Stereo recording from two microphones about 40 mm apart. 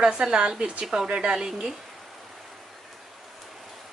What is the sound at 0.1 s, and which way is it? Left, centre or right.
A woman's voice, right.